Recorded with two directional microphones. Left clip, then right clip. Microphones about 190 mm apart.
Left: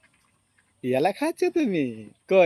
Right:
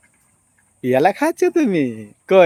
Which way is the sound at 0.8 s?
5° right (ahead or behind).